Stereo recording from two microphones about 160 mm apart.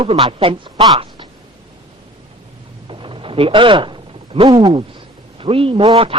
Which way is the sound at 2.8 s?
30° right (ahead or behind).